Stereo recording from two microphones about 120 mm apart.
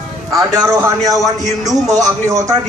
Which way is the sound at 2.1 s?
25° right (ahead or behind).